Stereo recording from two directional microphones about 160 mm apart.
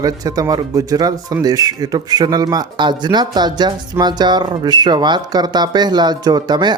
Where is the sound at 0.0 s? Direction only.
25° right (ahead or behind).